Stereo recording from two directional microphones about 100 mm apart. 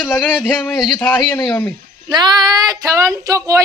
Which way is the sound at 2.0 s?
45° right (ahead or behind).